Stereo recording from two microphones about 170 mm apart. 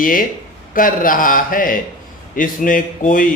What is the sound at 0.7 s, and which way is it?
Mantra, 55° left (ahead or behind).